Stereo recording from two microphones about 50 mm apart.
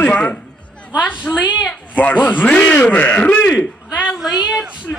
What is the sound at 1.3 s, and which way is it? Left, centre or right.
Speech, left.